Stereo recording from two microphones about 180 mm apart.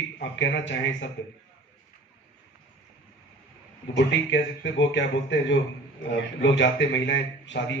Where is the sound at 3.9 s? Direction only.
80° left.